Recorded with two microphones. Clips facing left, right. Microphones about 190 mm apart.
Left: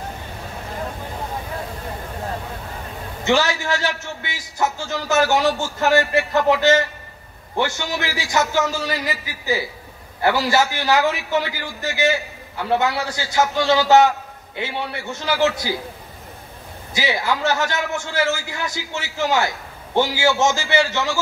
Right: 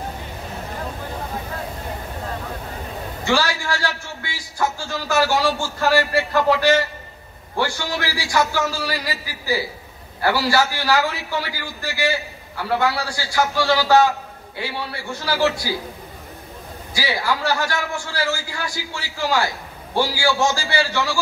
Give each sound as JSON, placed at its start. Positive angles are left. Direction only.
{"t": 3.3, "sound": "a man's voice", "side_deg": 20}
{"t": 16.9, "sound": "a man's voice", "side_deg": 20}